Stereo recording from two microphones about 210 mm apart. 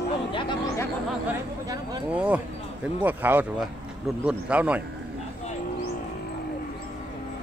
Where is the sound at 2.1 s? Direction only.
5° right (ahead or behind).